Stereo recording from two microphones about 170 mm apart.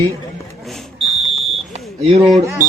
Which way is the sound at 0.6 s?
Centre (ahead or behind).